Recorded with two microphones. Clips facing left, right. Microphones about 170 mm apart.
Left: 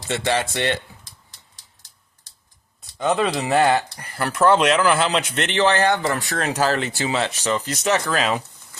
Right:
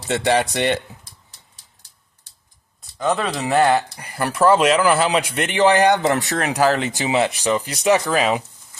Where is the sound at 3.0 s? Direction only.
5° left (ahead or behind).